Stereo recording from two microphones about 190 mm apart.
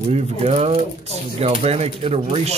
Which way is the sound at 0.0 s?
35° right (ahead or behind).